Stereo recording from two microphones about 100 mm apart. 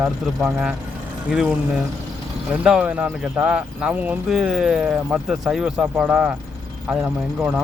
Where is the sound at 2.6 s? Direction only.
10° right (ahead or behind).